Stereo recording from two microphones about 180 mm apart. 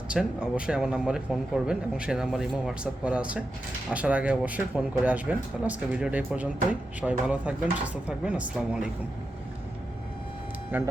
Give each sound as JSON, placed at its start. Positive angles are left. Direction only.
{"t": 0.1, "sound": "speech", "side_deg": -5}
{"t": 10.7, "sound": "speech", "side_deg": -10}